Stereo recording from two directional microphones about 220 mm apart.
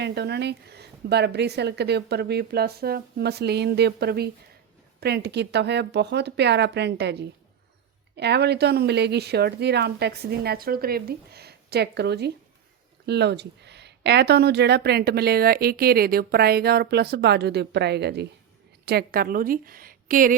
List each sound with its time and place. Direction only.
0.0 s a woman's voice: 50° right (ahead or behind)